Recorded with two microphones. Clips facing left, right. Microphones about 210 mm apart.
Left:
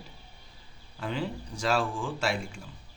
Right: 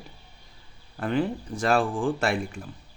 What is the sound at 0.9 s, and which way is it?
A man's voice, 55° right (ahead or behind).